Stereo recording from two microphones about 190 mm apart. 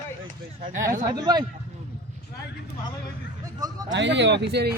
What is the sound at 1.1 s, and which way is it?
Speech, 20° right (ahead or behind).